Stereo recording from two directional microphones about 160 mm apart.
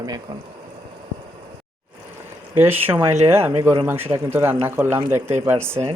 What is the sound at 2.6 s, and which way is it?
Speech, 15° right (ahead or behind).